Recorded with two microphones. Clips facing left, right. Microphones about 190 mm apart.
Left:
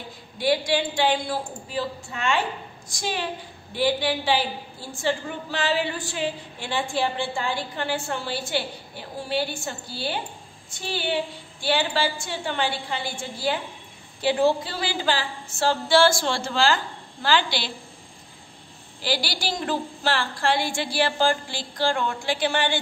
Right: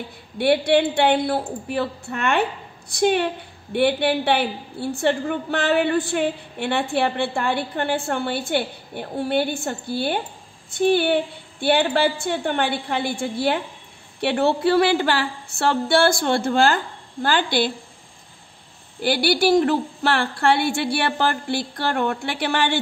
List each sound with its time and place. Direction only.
0.4 s a woman's voice: 60° right (ahead or behind)
18.9 s a woman's voice: 55° right (ahead or behind)